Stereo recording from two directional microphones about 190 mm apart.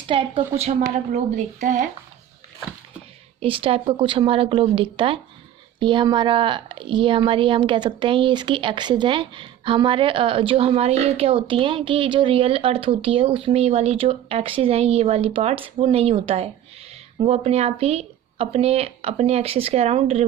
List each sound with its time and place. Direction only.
0.1 s speech: 30° right (ahead or behind)
3.4 s speech: 30° right (ahead or behind)